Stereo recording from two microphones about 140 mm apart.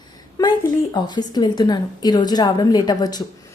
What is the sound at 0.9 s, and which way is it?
A woman's voice, 30° left (ahead or behind).